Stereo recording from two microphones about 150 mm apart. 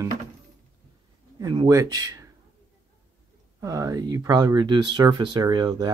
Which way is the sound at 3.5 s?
20° right (ahead or behind).